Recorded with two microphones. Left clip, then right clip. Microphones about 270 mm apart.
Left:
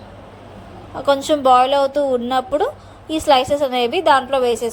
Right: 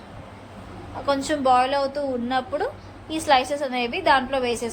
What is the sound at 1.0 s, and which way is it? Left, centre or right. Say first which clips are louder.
A woman's voice: left 7 dB; left.